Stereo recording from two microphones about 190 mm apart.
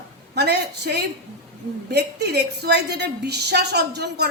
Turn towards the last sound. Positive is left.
turn(degrees=-60)  # may be behind; listen again after turning